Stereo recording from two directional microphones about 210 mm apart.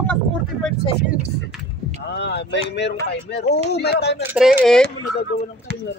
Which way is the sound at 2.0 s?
55° left (ahead or behind).